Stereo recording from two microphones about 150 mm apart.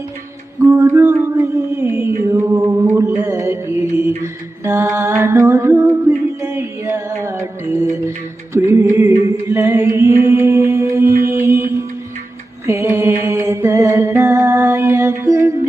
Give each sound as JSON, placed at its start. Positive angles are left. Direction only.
{"t": 0.6, "sound": "a sound", "side_deg": -20}
{"t": 2.3, "sound": "chant", "side_deg": -20}
{"t": 3.2, "sound": "music", "side_deg": -20}
{"t": 4.2, "sound": "mantra", "side_deg": -20}
{"t": 8.5, "sound": "a sound", "side_deg": -20}
{"t": 11.2, "sound": "music", "side_deg": -15}
{"t": 12.6, "sound": "mantra", "side_deg": -20}
{"t": 15.2, "sound": "music", "side_deg": -20}